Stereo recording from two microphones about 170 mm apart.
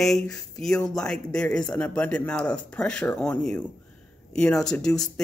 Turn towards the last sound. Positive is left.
turn(degrees=5)  # may be behind; listen again after turning